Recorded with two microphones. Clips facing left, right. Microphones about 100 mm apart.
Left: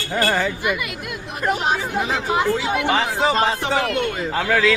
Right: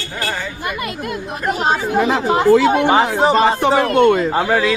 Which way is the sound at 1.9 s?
65° right (ahead or behind).